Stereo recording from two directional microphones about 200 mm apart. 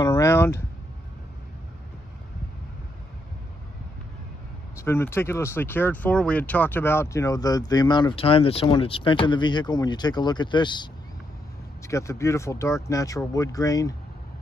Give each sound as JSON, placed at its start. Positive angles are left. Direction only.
{"t": 0.0, "sound": "a sound", "side_deg": 15}
{"t": 4.8, "sound": "speech", "side_deg": 10}
{"t": 11.9, "sound": "speech", "side_deg": 15}